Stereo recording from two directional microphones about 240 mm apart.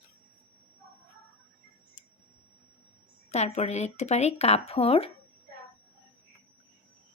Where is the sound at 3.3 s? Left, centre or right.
Left.